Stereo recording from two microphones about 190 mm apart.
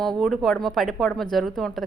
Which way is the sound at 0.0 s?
Centre (ahead or behind).